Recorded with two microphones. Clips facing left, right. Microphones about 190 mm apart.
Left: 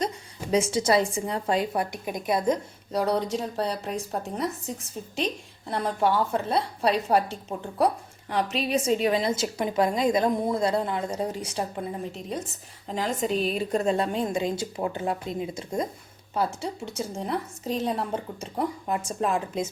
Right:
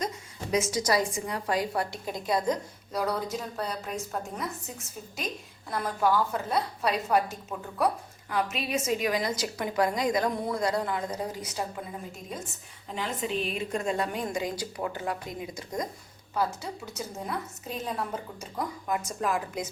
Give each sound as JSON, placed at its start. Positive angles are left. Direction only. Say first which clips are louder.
{"t": 0.5, "sound": "a woman's voice", "louder": "left 4 dB", "side_deg": 30}
{"t": 12.9, "sound": "a woman's voice", "louder": "left 5 dB", "side_deg": 40}